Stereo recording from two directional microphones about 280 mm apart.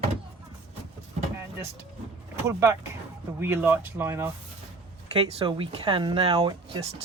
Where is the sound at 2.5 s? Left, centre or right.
Centre.